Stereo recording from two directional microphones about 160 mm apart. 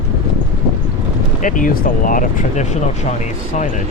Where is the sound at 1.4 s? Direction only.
55° left (ahead or behind).